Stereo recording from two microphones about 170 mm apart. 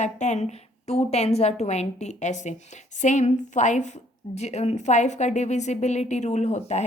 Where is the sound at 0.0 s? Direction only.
40° left (ahead or behind).